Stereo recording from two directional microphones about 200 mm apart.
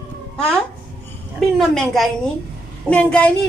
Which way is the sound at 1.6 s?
Centre (ahead or behind).